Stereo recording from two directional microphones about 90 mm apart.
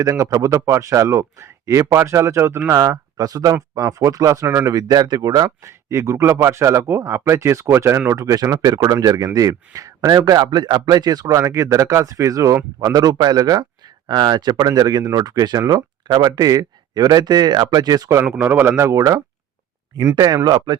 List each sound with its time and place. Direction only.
0.0 s a man's voice: 35° right (ahead or behind)
2.7 s a man's voice: 40° right (ahead or behind)
4.4 s speech: 25° right (ahead or behind)
4.7 s speech: 45° right (ahead or behind)
5.6 s a man's voice: 35° right (ahead or behind)
8.2 s a man's voice: 40° right (ahead or behind)
18.3 s a man's voice: 15° right (ahead or behind)
18.8 s a man's voice: 35° right (ahead or behind)
20.1 s speech: 50° right (ahead or behind)